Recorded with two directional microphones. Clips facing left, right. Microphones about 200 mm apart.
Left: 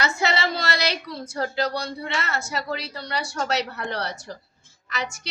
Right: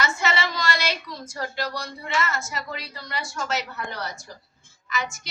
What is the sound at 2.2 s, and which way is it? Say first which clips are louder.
A woman's voice: left 2 dB; 65° left (ahead or behind).